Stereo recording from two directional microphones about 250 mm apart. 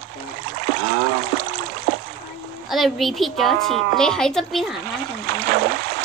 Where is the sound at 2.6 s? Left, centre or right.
Centre.